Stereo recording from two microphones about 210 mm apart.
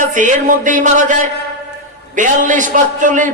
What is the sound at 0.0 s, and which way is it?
A man's voice, 35° right (ahead or behind).